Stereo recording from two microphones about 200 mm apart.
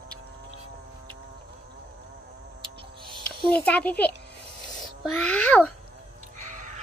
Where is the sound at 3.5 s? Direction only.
5° left (ahead or behind).